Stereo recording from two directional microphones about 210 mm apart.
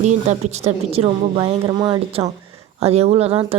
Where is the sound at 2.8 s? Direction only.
30° right (ahead or behind).